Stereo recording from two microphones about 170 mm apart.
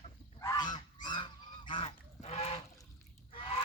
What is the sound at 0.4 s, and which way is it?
Goose, 25° left (ahead or behind).